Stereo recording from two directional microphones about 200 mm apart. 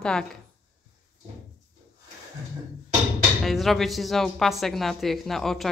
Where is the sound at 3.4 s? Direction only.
Centre (ahead or behind).